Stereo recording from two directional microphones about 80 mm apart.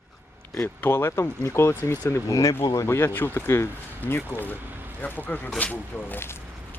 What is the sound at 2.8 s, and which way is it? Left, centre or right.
Speech, left.